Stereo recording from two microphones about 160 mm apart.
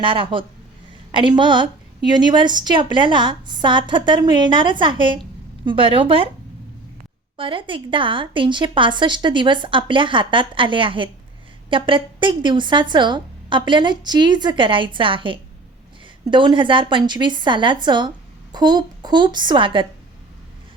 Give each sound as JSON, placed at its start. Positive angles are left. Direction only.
{"t": 0.0, "sound": "a woman's voice", "side_deg": -30}
{"t": 7.3, "sound": "a woman's voice", "side_deg": -35}